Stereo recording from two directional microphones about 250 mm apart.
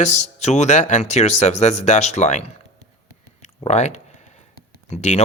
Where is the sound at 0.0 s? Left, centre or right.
Left.